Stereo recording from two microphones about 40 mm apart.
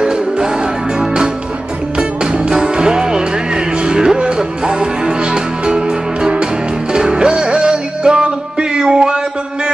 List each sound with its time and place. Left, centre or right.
0.0 s music: right